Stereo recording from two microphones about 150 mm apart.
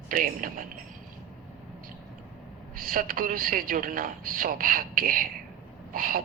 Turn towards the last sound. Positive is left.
turn(degrees=-70)  # may be behind; listen again after turning